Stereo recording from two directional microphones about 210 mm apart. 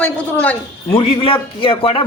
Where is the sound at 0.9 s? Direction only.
25° left (ahead or behind).